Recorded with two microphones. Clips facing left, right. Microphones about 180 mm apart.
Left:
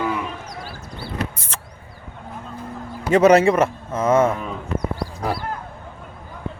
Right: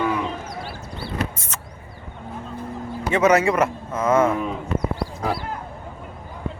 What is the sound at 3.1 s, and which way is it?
A man's voice, 30° left (ahead or behind).